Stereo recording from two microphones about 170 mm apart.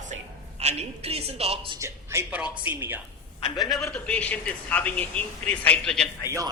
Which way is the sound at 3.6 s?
Centre (ahead or behind).